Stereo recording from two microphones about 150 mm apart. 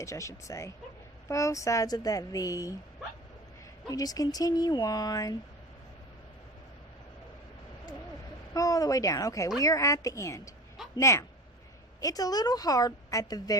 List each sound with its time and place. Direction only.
0.0 s a woman's voice: 20° left (ahead or behind)
3.8 s a woman's voice: 25° left (ahead or behind)
8.5 s a woman's voice: 25° left (ahead or behind)